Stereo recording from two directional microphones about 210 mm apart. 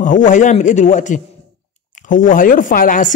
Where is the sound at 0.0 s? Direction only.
40° left (ahead or behind).